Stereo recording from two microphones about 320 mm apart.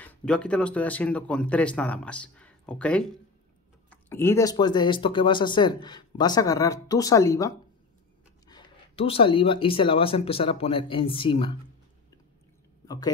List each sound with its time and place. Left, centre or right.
0.0 s speech: centre
12.8 s speech: centre